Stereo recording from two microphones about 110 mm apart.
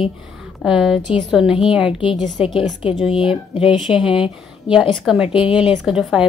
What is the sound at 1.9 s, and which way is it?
Speech, 45° left (ahead or behind).